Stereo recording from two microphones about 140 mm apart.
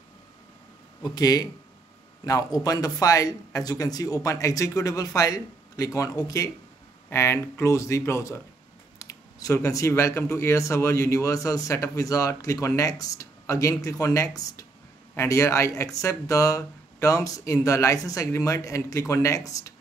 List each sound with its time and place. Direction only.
1.1 s speech: 25° left (ahead or behind)